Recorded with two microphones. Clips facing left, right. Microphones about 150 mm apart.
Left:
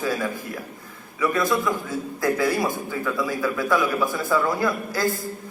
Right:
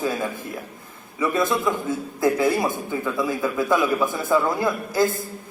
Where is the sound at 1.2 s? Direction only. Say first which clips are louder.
Right 1 dB; 25° right (ahead or behind).